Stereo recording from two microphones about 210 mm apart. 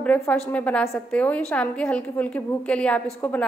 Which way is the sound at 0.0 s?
5° left (ahead or behind).